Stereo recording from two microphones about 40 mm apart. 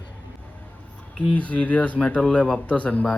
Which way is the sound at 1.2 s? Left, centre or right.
Left.